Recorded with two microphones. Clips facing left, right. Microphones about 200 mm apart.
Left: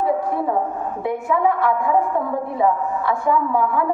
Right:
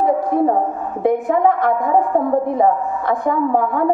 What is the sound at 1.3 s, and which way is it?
Speech, 50° right (ahead or behind).